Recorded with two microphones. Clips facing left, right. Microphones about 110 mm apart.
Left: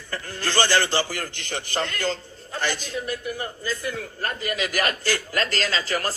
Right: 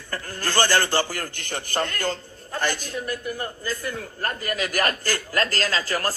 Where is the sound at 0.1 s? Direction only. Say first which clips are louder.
Even; 45° right (ahead or behind).